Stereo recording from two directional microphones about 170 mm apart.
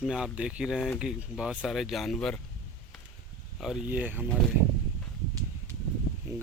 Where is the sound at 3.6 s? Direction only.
5° right (ahead or behind).